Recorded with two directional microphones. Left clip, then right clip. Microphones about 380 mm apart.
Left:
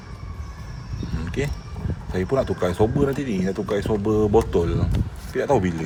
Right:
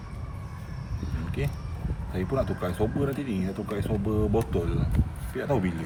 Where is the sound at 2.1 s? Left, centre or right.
Centre.